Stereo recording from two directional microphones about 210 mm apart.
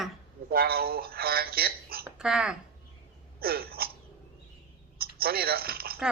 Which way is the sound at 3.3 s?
45° right (ahead or behind).